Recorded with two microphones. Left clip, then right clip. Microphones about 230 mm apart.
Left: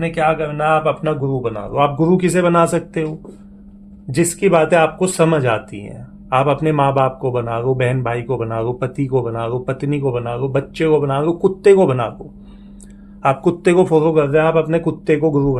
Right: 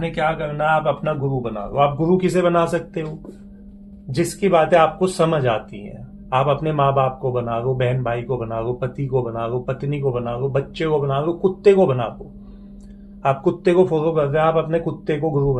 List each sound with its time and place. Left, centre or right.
0.0 s speech: left
4.1 s speech: left
13.2 s speech: left